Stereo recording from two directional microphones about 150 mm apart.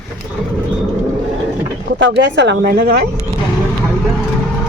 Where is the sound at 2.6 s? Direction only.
90° right.